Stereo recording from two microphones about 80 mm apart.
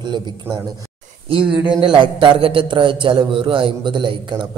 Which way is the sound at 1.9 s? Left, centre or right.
Right.